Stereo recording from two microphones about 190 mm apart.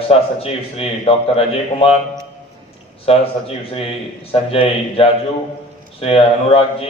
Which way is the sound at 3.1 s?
30° left (ahead or behind).